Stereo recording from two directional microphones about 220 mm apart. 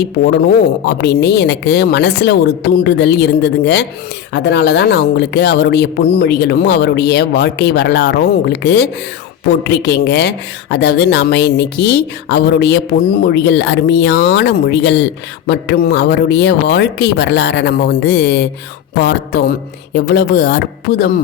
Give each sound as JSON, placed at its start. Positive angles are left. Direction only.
{"t": 0.0, "sound": "speech", "side_deg": 50}